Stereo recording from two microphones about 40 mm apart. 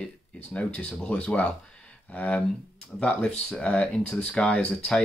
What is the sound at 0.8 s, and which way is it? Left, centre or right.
Speech, left.